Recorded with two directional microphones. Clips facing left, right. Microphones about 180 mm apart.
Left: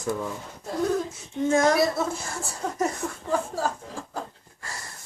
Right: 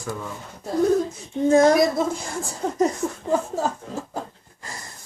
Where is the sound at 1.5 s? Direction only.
35° right (ahead or behind).